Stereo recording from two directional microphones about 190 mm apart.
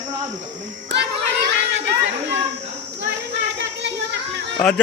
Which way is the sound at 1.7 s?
65° right (ahead or behind).